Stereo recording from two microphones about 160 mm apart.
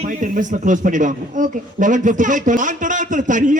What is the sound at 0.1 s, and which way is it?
A man's voice, 55° right (ahead or behind).